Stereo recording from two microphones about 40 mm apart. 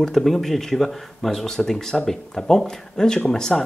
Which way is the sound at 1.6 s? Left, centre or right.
Centre.